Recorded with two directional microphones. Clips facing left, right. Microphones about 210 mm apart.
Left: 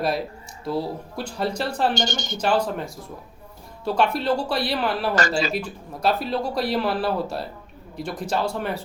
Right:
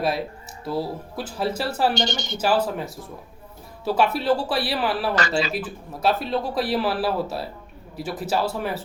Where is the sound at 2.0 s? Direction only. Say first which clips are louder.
Even; 45° left (ahead or behind).